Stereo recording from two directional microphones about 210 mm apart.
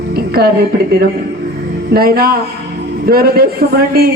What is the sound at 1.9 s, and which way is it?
A man's voice, 45° right (ahead or behind).